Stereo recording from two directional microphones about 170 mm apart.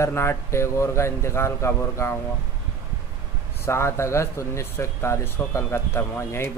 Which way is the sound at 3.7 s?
15° left (ahead or behind).